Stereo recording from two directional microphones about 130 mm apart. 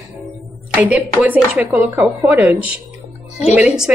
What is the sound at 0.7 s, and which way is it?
Speech, 15° right (ahead or behind).